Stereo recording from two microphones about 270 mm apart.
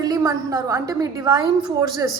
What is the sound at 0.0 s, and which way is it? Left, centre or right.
A woman's voice, centre.